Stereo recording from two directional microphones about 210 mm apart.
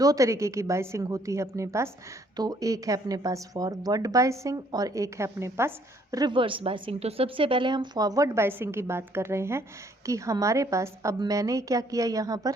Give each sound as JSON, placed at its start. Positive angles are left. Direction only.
{"t": 0.0, "sound": "speech", "side_deg": -15}